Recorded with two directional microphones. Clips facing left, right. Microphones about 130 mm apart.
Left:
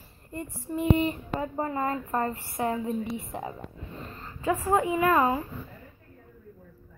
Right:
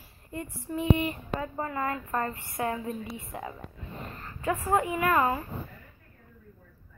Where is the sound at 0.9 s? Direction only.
25° left (ahead or behind).